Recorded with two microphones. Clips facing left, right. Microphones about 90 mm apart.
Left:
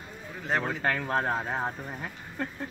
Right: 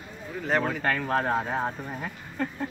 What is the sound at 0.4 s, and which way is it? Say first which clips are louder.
Speech: right 3 dB; 5° left (ahead or behind).